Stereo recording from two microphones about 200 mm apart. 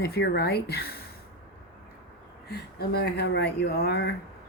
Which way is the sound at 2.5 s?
55° left (ahead or behind).